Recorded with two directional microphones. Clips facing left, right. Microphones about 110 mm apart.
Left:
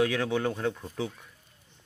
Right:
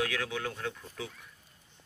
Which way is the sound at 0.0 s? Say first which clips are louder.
Left 7 dB; 30° left (ahead or behind).